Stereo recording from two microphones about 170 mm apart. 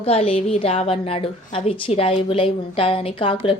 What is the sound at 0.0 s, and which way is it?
A woman's voice, 35° left (ahead or behind).